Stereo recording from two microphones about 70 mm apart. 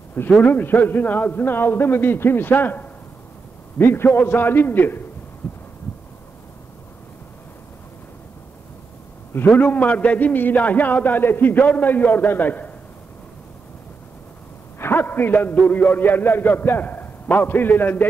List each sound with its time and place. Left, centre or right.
0.4 s a man's voice: left
9.6 s a man's voice: left
14.8 s a sound: left
15.5 s a man's voice: centre